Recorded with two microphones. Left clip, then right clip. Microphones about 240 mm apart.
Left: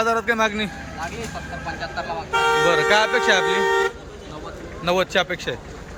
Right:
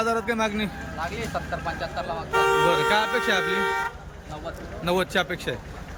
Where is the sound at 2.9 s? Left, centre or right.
Centre.